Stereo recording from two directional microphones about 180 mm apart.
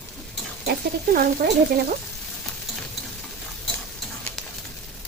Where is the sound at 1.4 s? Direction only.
55° right (ahead or behind).